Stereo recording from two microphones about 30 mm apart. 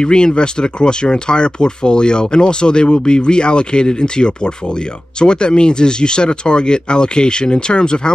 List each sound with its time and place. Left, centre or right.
0.0 s speech: left